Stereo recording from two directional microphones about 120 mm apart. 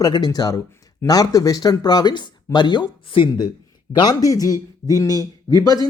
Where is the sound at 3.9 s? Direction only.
35° left (ahead or behind).